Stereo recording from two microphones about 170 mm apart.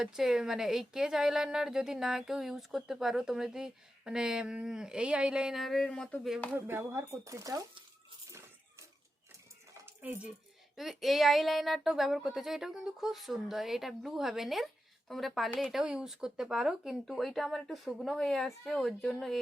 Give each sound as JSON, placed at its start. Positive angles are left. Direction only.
{"t": 0.0, "sound": "speech", "side_deg": 0}
{"t": 6.7, "sound": "speech", "side_deg": -15}
{"t": 8.3, "sound": "a sound", "side_deg": -15}
{"t": 9.8, "sound": "dishes", "side_deg": -10}
{"t": 10.8, "sound": "speech", "side_deg": 0}